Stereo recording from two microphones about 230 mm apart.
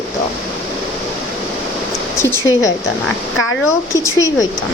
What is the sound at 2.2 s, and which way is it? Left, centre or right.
Speech, centre.